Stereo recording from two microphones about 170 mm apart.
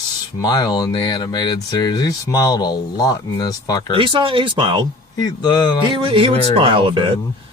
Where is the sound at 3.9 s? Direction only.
30° right (ahead or behind).